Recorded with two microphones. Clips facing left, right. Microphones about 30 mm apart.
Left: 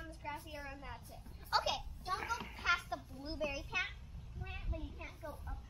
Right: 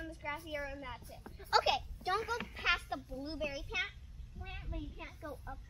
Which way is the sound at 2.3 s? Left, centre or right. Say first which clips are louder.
Right 2 dB; right.